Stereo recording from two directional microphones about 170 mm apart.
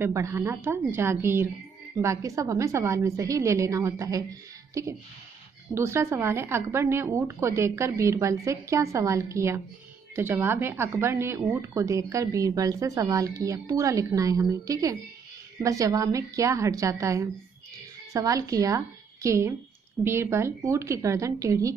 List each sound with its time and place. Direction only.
0.0 s a woman's voice: 15° right (ahead or behind)